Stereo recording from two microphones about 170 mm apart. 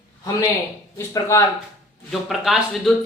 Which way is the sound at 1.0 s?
15° left (ahead or behind).